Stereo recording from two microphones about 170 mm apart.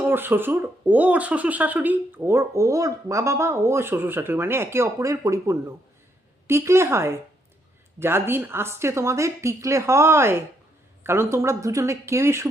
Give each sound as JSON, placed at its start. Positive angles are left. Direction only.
{"t": 0.1, "sound": "speech", "side_deg": -10}